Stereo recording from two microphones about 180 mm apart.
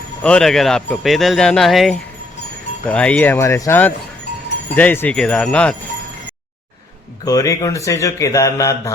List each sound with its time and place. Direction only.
0.2 s a man's voice: 5° left (ahead or behind)
7.3 s speech: 20° left (ahead or behind)